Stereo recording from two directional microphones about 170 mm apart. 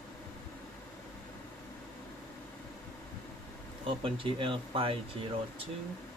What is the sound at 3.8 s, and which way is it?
Speech, 30° right (ahead or behind).